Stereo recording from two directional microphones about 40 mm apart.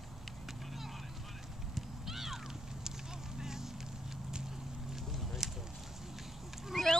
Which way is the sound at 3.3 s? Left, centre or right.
Centre.